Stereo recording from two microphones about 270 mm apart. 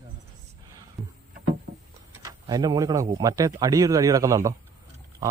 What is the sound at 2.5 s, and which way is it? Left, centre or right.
Speech, centre.